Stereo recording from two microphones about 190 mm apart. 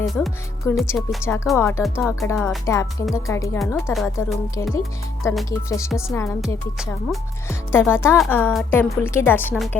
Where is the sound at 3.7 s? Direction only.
Centre (ahead or behind).